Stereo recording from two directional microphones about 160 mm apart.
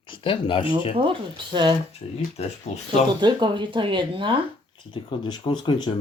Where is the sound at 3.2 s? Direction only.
30° right (ahead or behind).